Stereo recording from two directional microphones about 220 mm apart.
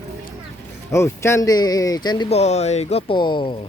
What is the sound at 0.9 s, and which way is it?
Speech, 10° left (ahead or behind).